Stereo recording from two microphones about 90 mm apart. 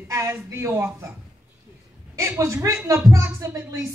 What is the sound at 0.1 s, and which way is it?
Speech, 35° right (ahead or behind).